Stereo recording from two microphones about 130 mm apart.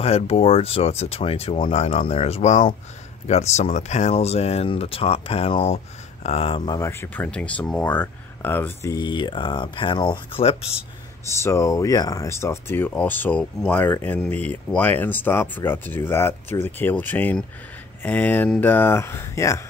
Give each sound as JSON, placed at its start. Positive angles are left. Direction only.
{"t": 0.0, "sound": "speech", "side_deg": 50}
{"t": 6.8, "sound": "speech", "side_deg": 20}
{"t": 7.2, "sound": "speech", "side_deg": 10}
{"t": 8.9, "sound": "speech", "side_deg": 35}
{"t": 11.2, "sound": "speech", "side_deg": 20}